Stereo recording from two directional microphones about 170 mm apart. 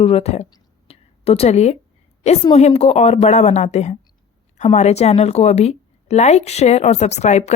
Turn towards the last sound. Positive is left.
turn(degrees=40)  # may be behind; listen again after turning